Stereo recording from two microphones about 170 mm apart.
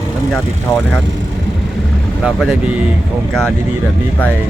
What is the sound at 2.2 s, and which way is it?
Speech, centre (ahead or behind).